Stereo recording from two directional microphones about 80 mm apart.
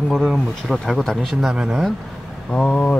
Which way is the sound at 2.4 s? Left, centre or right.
Centre.